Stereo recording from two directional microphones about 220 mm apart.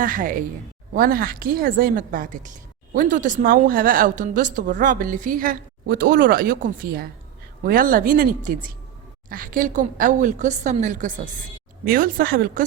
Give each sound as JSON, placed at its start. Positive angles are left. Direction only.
{"t": 0.0, "sound": "a woman's voice", "side_deg": -40}